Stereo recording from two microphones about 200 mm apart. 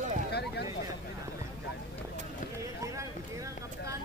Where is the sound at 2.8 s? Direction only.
15° right (ahead or behind).